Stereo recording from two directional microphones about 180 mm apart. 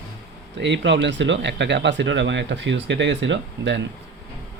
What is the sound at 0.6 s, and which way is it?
Speech, 80° right.